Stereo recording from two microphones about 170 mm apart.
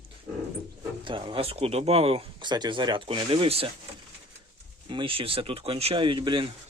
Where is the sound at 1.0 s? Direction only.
30° right (ahead or behind).